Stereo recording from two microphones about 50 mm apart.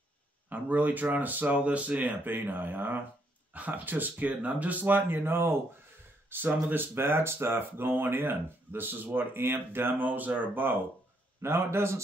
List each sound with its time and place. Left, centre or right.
0.5 s speech: right
11.4 s a man's voice: right